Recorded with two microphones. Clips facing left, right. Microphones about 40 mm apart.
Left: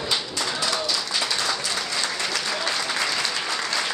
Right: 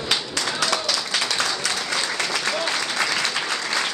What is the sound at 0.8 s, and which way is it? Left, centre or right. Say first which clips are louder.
Clapping: right 2 dB; right.